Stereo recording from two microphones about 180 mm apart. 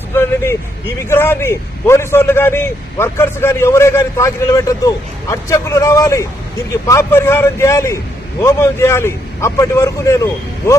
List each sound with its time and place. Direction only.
0.2 s speech: 15° left (ahead or behind)